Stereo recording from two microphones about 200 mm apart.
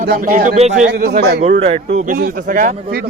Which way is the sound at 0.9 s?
50° right (ahead or behind).